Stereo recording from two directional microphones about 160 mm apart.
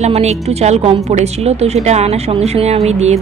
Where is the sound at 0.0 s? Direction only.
45° right (ahead or behind).